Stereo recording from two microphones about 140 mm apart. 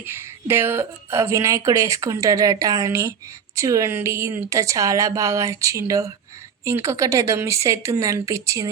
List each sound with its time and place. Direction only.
0.0 s a woman's voice: 15° right (ahead or behind)